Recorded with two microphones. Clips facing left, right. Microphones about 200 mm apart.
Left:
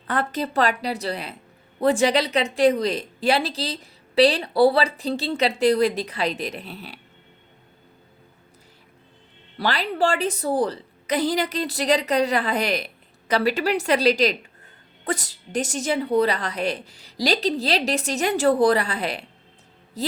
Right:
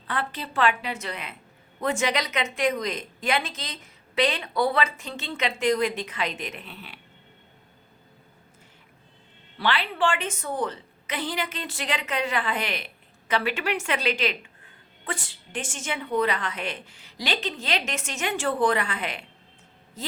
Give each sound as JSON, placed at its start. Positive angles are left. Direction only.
{"t": 0.1, "sound": "a woman's voice", "side_deg": 45}
{"t": 9.6, "sound": "a woman's voice", "side_deg": 40}